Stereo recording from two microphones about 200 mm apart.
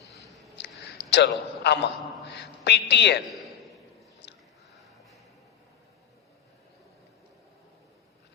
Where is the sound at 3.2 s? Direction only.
Centre (ahead or behind).